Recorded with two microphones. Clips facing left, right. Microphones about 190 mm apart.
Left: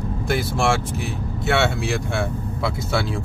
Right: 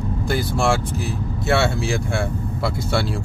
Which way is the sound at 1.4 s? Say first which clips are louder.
Right 1 dB; centre (ahead or behind).